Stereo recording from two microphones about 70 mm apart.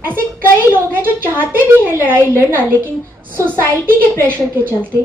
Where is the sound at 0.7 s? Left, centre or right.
Right.